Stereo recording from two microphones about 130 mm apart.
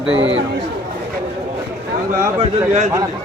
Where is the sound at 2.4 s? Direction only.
60° right (ahead or behind).